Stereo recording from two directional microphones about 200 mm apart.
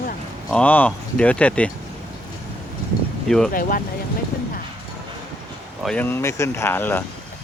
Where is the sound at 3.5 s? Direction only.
45° left (ahead or behind).